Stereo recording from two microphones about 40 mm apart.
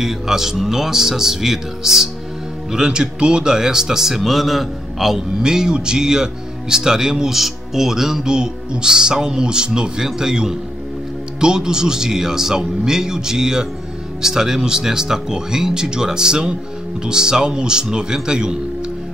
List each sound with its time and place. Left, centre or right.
0.0 s speech: centre
5.4 s speech: centre